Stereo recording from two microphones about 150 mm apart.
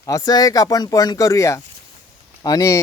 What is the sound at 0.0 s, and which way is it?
Speech, 25° left (ahead or behind).